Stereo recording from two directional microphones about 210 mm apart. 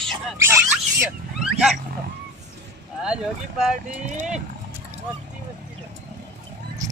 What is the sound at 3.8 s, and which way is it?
Speech, 35° right (ahead or behind).